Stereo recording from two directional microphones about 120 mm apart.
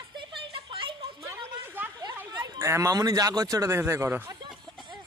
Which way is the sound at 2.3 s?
35° right (ahead or behind).